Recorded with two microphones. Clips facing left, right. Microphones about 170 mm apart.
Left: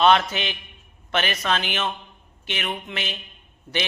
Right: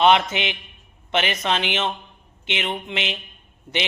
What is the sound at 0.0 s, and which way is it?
A man's voice, 20° right (ahead or behind).